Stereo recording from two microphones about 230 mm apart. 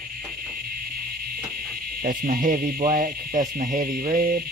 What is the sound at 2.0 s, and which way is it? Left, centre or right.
Insect, right.